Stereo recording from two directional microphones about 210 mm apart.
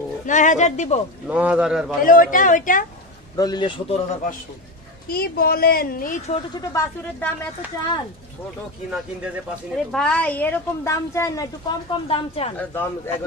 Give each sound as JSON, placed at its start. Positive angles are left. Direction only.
{"t": 0.3, "sound": "speech", "side_deg": 35}
{"t": 1.2, "sound": "a man's voice", "side_deg": -5}
{"t": 2.0, "sound": "speech", "side_deg": 40}
{"t": 3.3, "sound": "a man's voice", "side_deg": 20}
{"t": 5.1, "sound": "a woman's voice", "side_deg": 45}
{"t": 8.9, "sound": "a man's voice", "side_deg": -5}
{"t": 12.5, "sound": "a woman's voice", "side_deg": 10}